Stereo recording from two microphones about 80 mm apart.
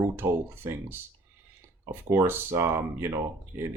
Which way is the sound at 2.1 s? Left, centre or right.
Right.